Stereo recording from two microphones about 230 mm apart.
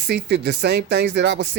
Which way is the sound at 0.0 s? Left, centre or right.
Right.